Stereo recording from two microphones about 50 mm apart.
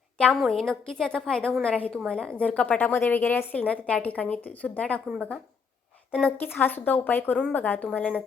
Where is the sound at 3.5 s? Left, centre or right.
Left.